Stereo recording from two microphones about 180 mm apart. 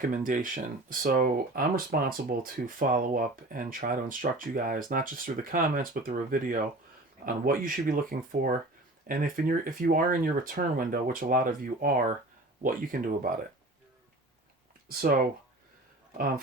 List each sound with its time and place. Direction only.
0.1 s speech: 45° right (ahead or behind)
14.8 s speech: 55° right (ahead or behind)